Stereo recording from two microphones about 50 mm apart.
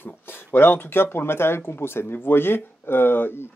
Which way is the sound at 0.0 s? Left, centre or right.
Left.